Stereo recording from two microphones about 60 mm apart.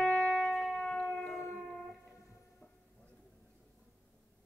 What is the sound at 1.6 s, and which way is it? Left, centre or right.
Music, centre.